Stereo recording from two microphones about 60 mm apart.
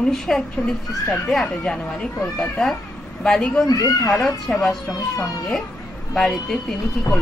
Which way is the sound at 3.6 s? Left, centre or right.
Left.